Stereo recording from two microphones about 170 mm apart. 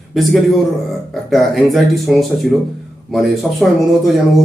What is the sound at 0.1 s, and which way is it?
A man's voice, centre (ahead or behind).